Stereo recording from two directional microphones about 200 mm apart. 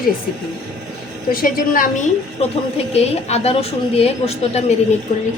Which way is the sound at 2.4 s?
30° left (ahead or behind).